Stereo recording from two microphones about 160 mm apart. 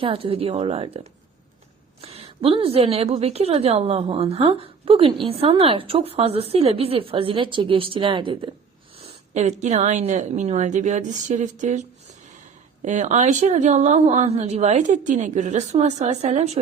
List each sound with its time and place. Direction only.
0.0 s a woman's voice: 35° right (ahead or behind)
9.0 s speech: 45° right (ahead or behind)
12.8 s speech: 50° right (ahead or behind)